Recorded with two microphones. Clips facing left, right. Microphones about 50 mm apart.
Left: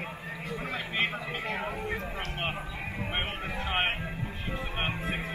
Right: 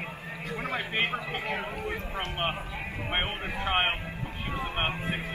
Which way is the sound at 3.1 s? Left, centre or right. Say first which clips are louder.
Right 4 dB; right.